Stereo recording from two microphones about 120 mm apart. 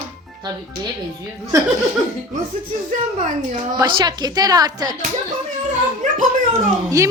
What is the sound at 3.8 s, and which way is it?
A woman's voice, 35° right (ahead or behind).